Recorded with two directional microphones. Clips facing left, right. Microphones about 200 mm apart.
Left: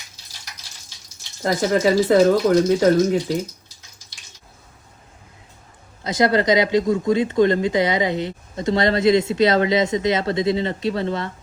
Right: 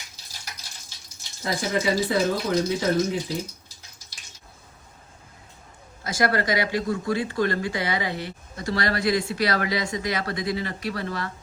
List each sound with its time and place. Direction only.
1.5 s speech: 45° left (ahead or behind)
6.0 s speech: 20° left (ahead or behind)